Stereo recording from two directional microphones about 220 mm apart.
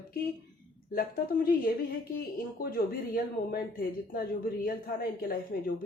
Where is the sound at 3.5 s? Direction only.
40° left (ahead or behind).